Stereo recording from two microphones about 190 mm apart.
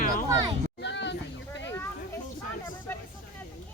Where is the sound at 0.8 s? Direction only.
65° left (ahead or behind).